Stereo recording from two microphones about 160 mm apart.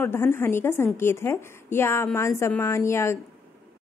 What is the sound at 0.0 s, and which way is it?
A woman's voice, 15° left (ahead or behind).